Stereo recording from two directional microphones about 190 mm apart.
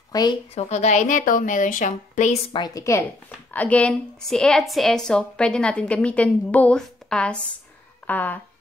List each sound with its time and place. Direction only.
0.1 s a woman's voice: 20° left (ahead or behind)
0.6 s a woman's voice: 35° left (ahead or behind)
2.5 s a woman's voice: 20° left (ahead or behind)